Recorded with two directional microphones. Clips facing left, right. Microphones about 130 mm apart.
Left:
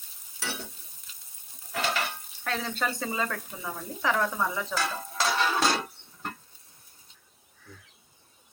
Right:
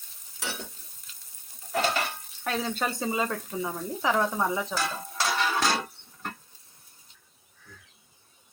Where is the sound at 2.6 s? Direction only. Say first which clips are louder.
Right 2 dB; 25° right (ahead or behind).